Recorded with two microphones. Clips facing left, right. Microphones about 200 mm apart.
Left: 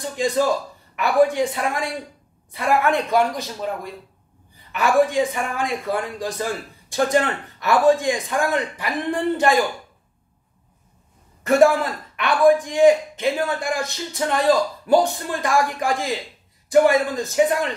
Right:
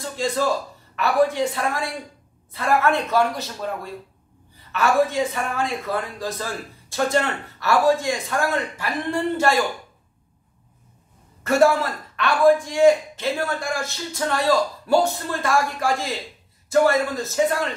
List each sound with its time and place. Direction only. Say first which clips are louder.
0.0 s a man's voice: left 3 dB; 15° left (ahead or behind)
11.4 s speech: left 2 dB; 15° left (ahead or behind)